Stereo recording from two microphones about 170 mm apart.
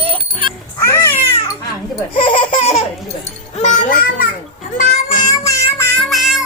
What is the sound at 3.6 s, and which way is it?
Music, 45° left (ahead or behind).